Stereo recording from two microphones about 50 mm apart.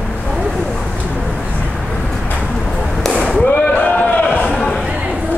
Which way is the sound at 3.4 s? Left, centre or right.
Left.